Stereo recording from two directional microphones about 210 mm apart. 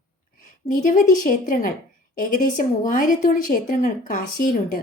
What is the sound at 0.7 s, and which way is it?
Speech, 40° left (ahead or behind).